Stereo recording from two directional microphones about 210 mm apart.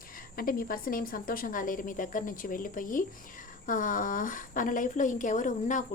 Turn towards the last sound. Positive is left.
turn(degrees=35)  # may be behind; listen again after turning